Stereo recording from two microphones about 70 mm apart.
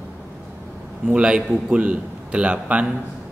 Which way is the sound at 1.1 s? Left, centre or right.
Centre.